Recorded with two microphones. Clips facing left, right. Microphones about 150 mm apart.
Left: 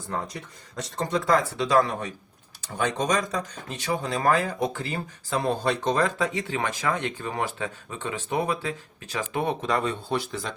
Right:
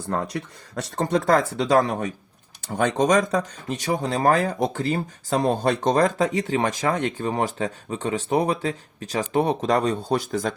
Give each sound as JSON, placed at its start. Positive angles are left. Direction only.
{"t": 0.1, "sound": "speech", "side_deg": -60}
{"t": 0.9, "sound": "speech", "side_deg": -50}